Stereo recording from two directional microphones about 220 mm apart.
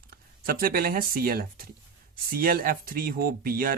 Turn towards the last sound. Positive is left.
turn(degrees=-40)  # may be behind; listen again after turning